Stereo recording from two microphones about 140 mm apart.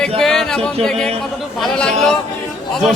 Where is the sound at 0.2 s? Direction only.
5° left (ahead or behind).